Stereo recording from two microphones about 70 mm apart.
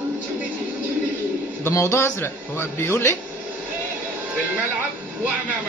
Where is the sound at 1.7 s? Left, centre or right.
Left.